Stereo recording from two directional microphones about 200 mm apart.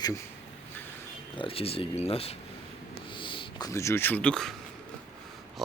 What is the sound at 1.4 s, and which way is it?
Speech, 30° left (ahead or behind).